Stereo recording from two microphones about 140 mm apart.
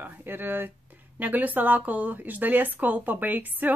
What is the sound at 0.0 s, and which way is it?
Speech, 15° right (ahead or behind).